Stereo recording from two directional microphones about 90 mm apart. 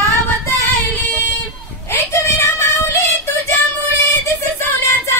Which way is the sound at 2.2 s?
30° left (ahead or behind).